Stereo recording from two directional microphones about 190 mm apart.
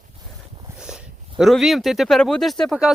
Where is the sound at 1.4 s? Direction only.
Centre (ahead or behind).